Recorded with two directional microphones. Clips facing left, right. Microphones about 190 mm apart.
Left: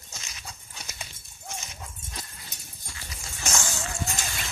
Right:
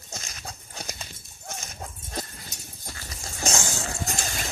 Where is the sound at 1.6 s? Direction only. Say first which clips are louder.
Right 3 dB; 45° right (ahead or behind).